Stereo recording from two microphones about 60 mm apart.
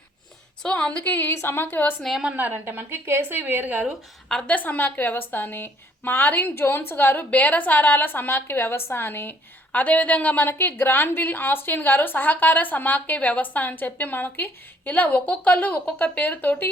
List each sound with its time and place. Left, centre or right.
0.6 s a woman's voice: centre
1.4 s a woman's voice: left
2.3 s a woman's voice: right
4.4 s a woman's voice: left
9.7 s a woman's voice: left